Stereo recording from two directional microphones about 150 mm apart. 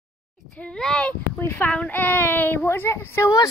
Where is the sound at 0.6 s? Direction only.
5° left (ahead or behind).